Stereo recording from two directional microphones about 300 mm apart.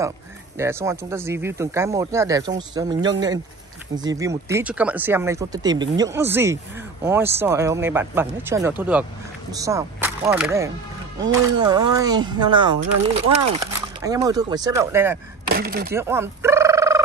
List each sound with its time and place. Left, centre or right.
0.6 s speech: centre
14.0 s speech: centre
15.4 s speech: right
15.9 s fowl: centre